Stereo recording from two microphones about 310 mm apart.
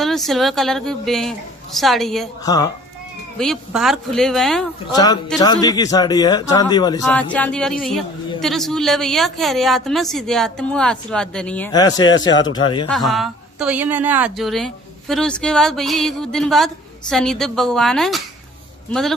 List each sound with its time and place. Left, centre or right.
0.0 s speech: centre
2.4 s a man's voice: centre
3.3 s speech: centre
4.9 s a man's voice: centre
12.9 s speech: centre